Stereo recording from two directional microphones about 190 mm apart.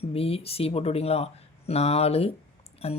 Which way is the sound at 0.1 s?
30° left (ahead or behind).